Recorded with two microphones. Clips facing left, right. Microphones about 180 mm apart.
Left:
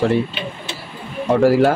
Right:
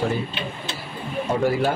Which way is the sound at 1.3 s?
90° left.